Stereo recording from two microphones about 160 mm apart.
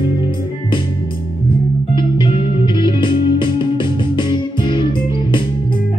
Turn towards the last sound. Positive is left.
turn(degrees=30)  # may be behind; listen again after turning